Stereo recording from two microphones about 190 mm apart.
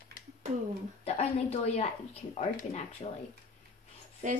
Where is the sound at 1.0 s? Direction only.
35° left (ahead or behind).